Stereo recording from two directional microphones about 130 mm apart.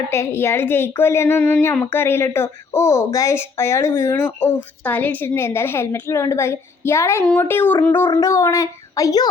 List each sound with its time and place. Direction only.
0.1 s a woman's voice: 20° left (ahead or behind)